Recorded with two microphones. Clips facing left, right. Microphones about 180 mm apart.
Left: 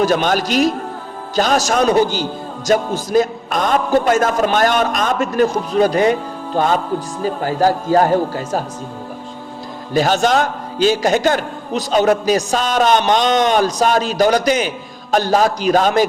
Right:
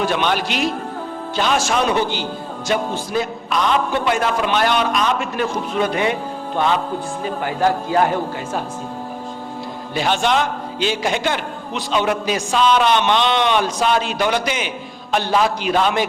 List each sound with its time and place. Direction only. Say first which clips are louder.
0.0 s a man's voice: left 4 dB; 40° left (ahead or behind)
9.9 s a man's voice: left 4 dB; 40° left (ahead or behind)